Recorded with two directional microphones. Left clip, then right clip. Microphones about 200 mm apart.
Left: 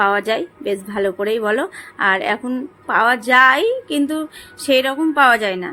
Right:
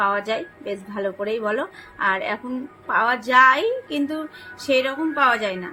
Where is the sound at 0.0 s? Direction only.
45° left (ahead or behind).